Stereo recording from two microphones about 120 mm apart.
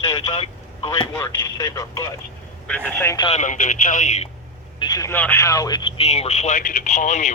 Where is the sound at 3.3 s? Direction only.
90° left.